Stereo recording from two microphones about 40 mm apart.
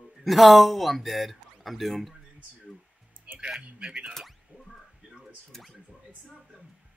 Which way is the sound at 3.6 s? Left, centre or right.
Right.